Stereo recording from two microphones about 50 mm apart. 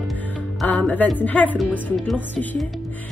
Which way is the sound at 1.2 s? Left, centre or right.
Left.